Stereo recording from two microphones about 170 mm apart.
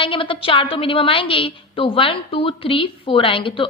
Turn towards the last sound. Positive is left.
turn(degrees=30)  # may be behind; listen again after turning